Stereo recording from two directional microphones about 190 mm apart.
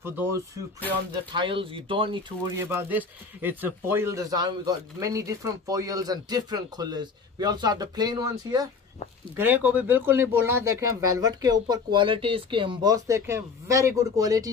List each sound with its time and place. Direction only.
0.0 s speech: 10° right (ahead or behind)
1.3 s a man's voice: 25° right (ahead or behind)
2.5 s a man's voice: 10° right (ahead or behind)
9.4 s speech: 10° right (ahead or behind)